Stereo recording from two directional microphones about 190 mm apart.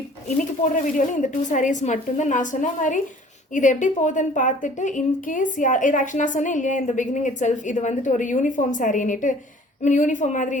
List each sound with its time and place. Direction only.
0.7 s a woman's voice: 40° left (ahead or behind)